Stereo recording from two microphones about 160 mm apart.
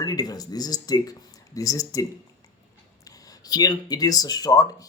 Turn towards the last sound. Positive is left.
turn(degrees=20)  # may be behind; listen again after turning